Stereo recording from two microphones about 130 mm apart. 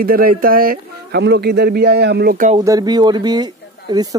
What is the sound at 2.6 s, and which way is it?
Speech, 30° right (ahead or behind).